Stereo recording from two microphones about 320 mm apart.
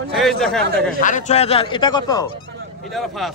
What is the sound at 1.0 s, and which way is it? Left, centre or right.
Speech, left.